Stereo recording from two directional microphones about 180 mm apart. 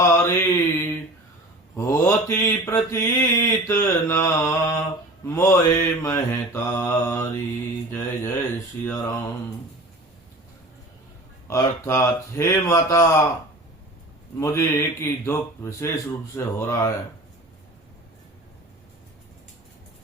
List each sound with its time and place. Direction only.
0.0 s mantra: 15° left (ahead or behind)
7.9 s speech: 15° left (ahead or behind)
11.4 s mantra: 15° left (ahead or behind)
14.3 s mantra: 15° left (ahead or behind)